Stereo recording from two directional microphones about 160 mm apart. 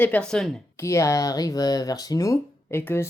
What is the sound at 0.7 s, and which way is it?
Speech, 15° left (ahead or behind).